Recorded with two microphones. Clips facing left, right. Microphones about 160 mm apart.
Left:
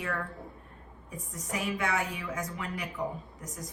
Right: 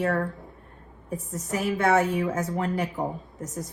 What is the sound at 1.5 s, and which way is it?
Speech, 40° right (ahead or behind).